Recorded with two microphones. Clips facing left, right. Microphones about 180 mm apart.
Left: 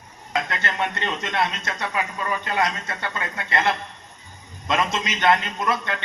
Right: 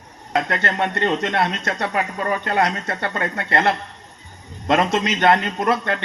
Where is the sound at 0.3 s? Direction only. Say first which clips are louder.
Right 5 dB; 60° right (ahead or behind).